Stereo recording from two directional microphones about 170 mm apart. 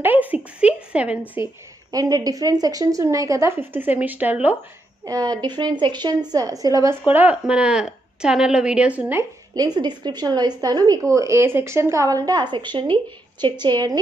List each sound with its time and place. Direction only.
0.0 s speech: 10° right (ahead or behind)
0.6 s a sound: 5° right (ahead or behind)
1.3 s a woman's voice: 20° right (ahead or behind)
5.0 s a woman's voice: 20° right (ahead or behind)
9.7 s speech: 25° right (ahead or behind)